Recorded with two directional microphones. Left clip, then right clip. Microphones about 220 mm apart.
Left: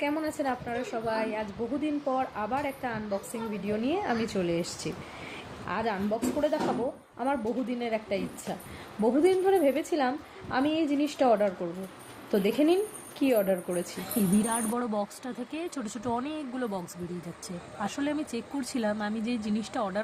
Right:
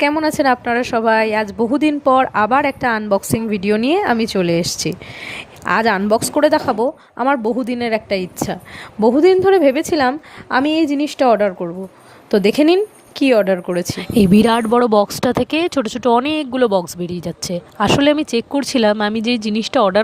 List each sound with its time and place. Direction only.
0.0 s a woman's voice: 40° right (ahead or behind)